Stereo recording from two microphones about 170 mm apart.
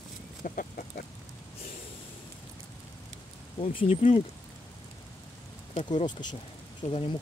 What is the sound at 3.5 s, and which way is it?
Speech, 35° left (ahead or behind).